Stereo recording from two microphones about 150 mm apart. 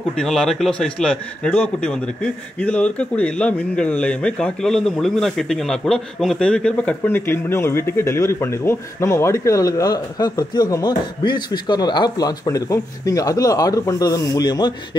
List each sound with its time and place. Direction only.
0.2 s a man's voice: 5° left (ahead or behind); by 14.7 s 25° left (ahead or behind)